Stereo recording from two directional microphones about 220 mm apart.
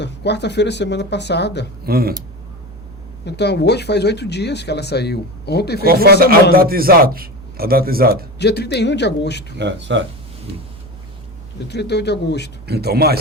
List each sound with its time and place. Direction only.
0.0 s speech: 50° left (ahead or behind)
1.9 s a man's voice: 45° right (ahead or behind)
3.2 s speech: 50° left (ahead or behind)
5.8 s a man's voice: 45° right (ahead or behind)
8.4 s speech: 50° left (ahead or behind)
9.6 s a man's voice: 55° right (ahead or behind)
11.7 s speech: 50° left (ahead or behind)
12.6 s a man's voice: 45° right (ahead or behind)